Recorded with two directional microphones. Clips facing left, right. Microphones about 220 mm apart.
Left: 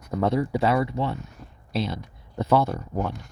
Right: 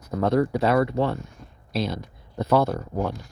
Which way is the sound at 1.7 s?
40° right (ahead or behind).